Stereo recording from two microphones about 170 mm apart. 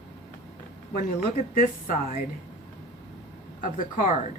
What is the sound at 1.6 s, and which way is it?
Speech, 50° left (ahead or behind).